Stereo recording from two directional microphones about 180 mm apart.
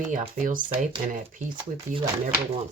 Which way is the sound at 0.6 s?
30° right (ahead or behind).